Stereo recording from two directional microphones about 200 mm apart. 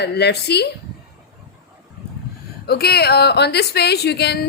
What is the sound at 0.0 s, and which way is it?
Speech, 55° left (ahead or behind).